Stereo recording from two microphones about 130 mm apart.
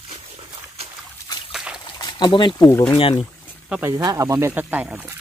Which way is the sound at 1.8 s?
35° left (ahead or behind).